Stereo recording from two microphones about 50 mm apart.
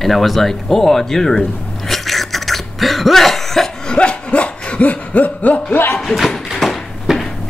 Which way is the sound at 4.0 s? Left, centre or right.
Left.